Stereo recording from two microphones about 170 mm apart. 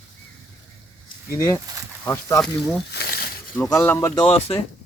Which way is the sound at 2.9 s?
75° left (ahead or behind).